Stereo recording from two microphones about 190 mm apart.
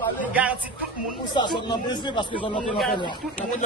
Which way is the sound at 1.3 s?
25° left (ahead or behind).